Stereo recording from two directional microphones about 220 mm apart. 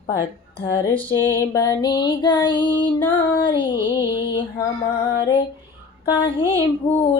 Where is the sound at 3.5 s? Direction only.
20° left (ahead or behind).